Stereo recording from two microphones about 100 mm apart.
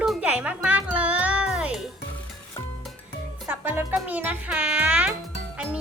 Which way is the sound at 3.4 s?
20° right (ahead or behind).